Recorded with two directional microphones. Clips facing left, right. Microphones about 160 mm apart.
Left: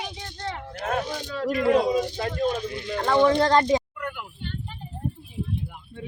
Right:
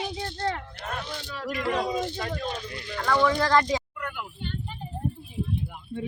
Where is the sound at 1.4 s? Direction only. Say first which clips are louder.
Left 7 dB; 30° left (ahead or behind).